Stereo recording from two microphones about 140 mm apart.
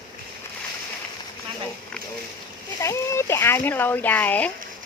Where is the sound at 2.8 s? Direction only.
20° left (ahead or behind).